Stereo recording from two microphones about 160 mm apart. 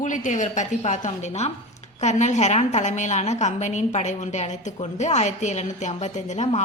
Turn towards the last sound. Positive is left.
turn(degrees=45)  # may be behind; listen again after turning